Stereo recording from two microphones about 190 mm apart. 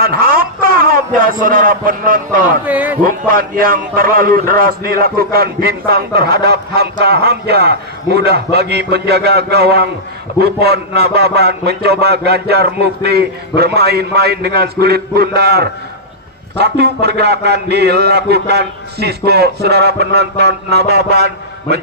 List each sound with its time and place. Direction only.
0.0 s a man's voice: 50° right (ahead or behind)
2.6 s speech: 10° right (ahead or behind)
3.0 s a man's voice: 50° right (ahead or behind)